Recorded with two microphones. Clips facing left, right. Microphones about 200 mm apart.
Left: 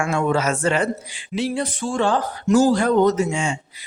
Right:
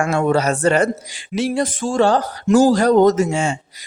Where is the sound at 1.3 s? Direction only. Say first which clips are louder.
Right 3 dB; 55° right (ahead or behind).